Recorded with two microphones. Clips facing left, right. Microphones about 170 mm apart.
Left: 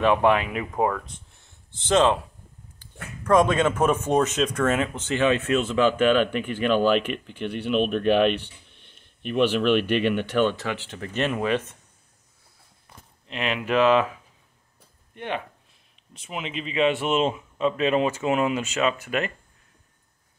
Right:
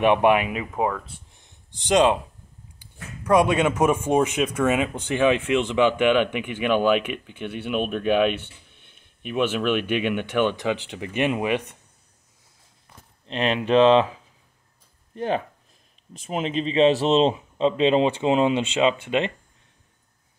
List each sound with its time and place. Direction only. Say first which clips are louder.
0.0 s speech: right 2 dB; 15° right (ahead or behind)
13.3 s a man's voice: right 5 dB; 30° right (ahead or behind)
15.1 s a man's voice: right 6 dB; 35° right (ahead or behind)